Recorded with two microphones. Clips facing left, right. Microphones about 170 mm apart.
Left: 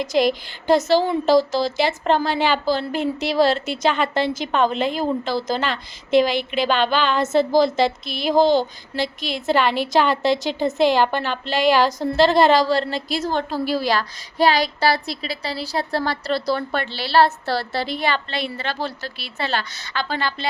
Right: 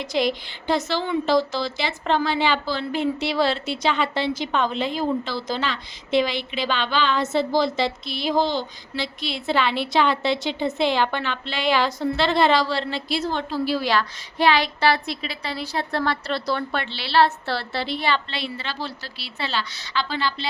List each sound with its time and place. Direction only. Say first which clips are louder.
0.0 s a woman's voice: left 4 dB; 45° left (ahead or behind)